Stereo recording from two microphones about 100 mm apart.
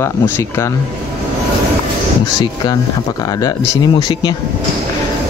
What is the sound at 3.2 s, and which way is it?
Speech, 40° left (ahead or behind).